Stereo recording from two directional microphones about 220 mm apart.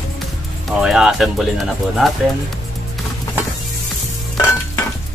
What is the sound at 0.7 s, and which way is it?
Speech, centre (ahead or behind).